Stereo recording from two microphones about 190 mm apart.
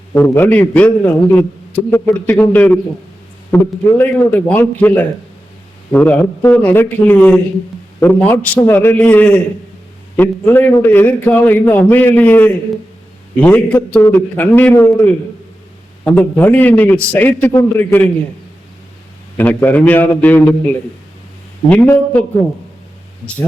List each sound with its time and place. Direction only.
0.1 s a man's voice: 10° left (ahead or behind)
19.4 s a man's voice: 10° left (ahead or behind)